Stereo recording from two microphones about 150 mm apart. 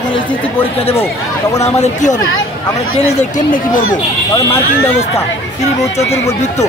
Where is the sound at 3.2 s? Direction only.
60° left (ahead or behind).